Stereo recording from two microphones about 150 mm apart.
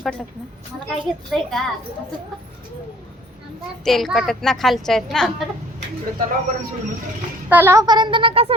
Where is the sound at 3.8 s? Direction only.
Centre (ahead or behind).